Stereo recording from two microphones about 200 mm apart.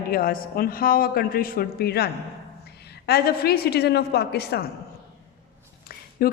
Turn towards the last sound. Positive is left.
turn(degrees=50)  # may be behind; listen again after turning